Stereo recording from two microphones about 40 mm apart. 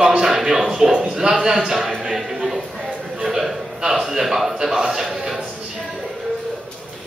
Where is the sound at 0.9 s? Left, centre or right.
Right.